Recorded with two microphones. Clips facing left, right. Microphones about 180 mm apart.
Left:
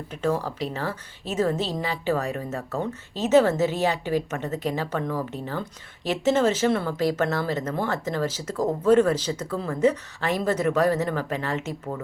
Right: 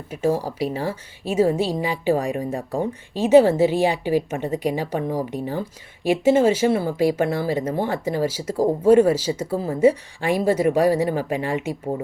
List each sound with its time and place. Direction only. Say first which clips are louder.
0.3 s speech: right 4 dB; 35° right (ahead or behind)
0.6 s a woman's voice: right 5 dB; 10° right (ahead or behind)